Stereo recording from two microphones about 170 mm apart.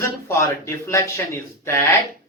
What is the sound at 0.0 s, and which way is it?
Speech, 15° left (ahead or behind).